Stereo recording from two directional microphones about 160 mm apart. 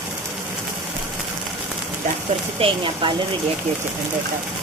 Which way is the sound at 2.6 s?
35° right (ahead or behind).